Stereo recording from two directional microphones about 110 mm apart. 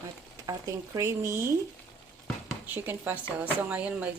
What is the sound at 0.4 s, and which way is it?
Speech, 30° right (ahead or behind).